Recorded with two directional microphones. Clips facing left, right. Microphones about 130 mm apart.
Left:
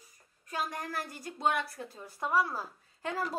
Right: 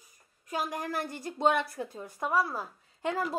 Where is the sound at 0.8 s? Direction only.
25° right (ahead or behind).